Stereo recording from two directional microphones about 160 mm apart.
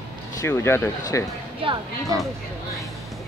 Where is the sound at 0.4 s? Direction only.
15° left (ahead or behind).